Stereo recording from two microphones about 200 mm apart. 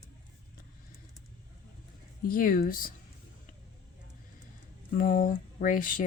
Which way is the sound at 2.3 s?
45° left (ahead or behind).